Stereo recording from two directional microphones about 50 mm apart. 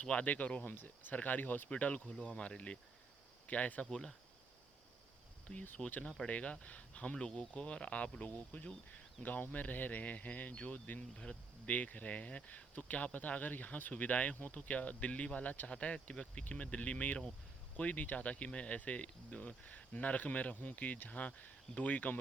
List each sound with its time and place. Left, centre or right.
0.0 s speech: left
0.6 s speech: left
1.7 s speech: left
3.8 s speech: centre
5.5 s speech: centre
11.2 s speech: left
11.7 s speech: left
16.4 s speech: left